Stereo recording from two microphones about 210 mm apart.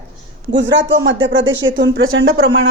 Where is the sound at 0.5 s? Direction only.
60° right (ahead or behind).